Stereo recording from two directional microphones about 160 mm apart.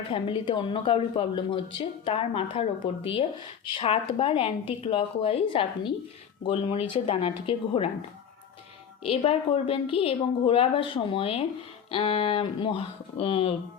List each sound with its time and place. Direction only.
0.1 s speech: 30° left (ahead or behind)
9.0 s speech: 35° left (ahead or behind)